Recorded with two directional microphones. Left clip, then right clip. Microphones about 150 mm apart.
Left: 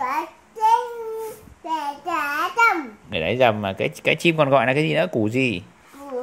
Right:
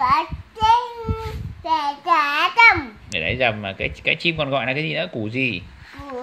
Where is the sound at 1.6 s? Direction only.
5° right (ahead or behind).